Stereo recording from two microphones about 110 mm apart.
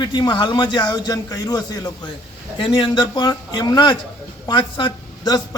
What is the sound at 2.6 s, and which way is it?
A man's voice, 50° left (ahead or behind).